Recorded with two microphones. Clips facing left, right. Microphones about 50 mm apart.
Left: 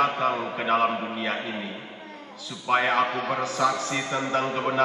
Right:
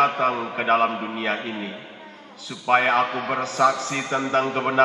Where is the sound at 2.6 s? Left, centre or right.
Right.